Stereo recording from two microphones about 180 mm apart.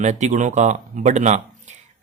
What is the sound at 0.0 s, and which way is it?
Speech, 40° right (ahead or behind).